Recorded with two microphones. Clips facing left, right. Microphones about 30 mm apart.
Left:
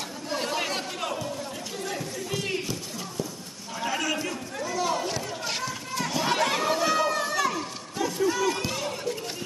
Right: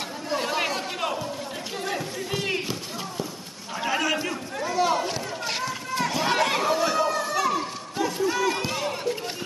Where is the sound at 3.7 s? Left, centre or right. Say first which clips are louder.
Right 3 dB; right.